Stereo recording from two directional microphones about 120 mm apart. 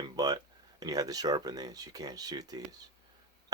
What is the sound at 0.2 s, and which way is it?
Speech, 30° right (ahead or behind).